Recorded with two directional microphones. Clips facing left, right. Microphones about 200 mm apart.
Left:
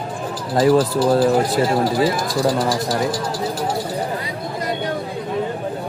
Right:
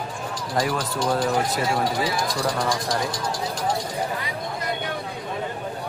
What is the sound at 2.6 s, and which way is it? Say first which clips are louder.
Speech: left 5 dB; 5° left (ahead or behind).